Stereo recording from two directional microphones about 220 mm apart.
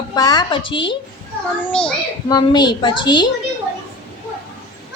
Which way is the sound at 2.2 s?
20° left (ahead or behind).